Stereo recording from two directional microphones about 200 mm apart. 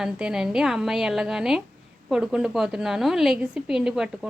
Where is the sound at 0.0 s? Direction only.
5° right (ahead or behind).